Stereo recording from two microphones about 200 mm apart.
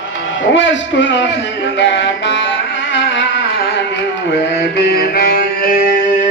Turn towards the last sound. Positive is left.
turn(degrees=50)  # may be behind; listen again after turning